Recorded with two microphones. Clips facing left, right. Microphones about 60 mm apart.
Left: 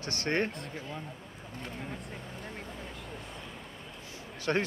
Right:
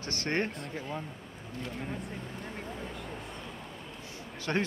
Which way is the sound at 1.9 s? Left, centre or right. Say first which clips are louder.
Right 3 dB; centre.